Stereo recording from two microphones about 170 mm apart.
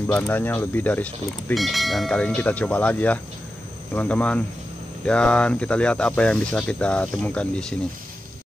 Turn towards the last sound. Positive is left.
turn(degrees=5)  # may be behind; listen again after turning